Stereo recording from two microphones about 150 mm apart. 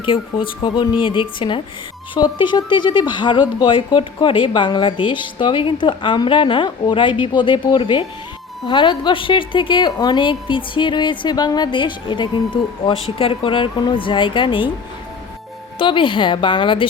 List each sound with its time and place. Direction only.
0.0 s a woman's voice: 35° left (ahead or behind)
15.8 s a woman's voice: 35° left (ahead or behind)